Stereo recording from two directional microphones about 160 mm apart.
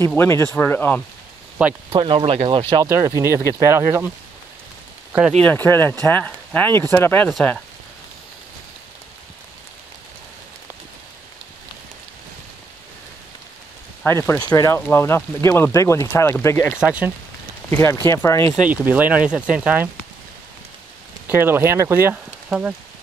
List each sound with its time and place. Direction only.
0.2 s speech: 15° left (ahead or behind)
1.9 s speech: 35° right (ahead or behind)
2.8 s speech: 20° right (ahead or behind)
5.4 s speech: 10° left (ahead or behind)
7.2 s speech: centre (ahead or behind)
14.0 s speech: 15° left (ahead or behind)
16.8 s speech: 10° right (ahead or behind)
17.6 s speech: 15° left (ahead or behind)
18.6 s speech: 10° right (ahead or behind)
21.3 s speech: 15° right (ahead or behind)